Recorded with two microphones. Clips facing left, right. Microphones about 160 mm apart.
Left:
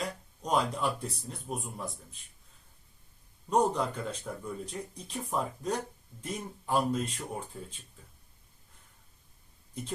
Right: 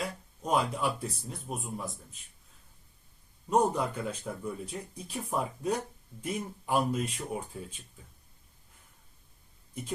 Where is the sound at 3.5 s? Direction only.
10° right (ahead or behind).